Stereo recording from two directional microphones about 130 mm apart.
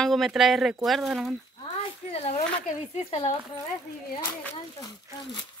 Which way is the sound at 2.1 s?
50° left (ahead or behind).